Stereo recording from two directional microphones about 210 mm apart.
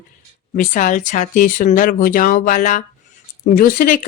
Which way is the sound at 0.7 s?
35° left (ahead or behind).